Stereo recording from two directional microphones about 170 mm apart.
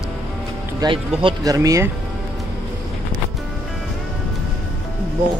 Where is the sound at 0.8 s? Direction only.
25° right (ahead or behind).